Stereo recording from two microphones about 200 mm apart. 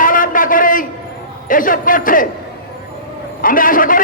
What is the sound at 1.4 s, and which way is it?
Speech, 45° left (ahead or behind).